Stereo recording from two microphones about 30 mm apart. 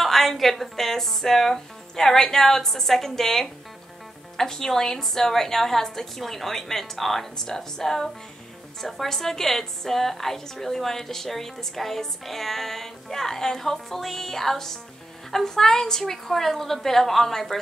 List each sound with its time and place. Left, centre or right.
0.0 s a woman's voice: centre
8.8 s a woman's voice: centre